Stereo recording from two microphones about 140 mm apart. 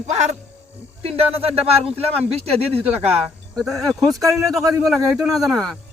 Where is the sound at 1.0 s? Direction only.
45° right (ahead or behind).